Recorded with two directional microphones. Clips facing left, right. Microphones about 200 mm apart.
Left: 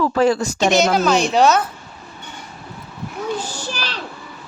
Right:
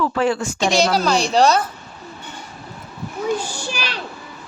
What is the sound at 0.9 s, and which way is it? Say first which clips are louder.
Speech: left 1 dB; 5° left (ahead or behind).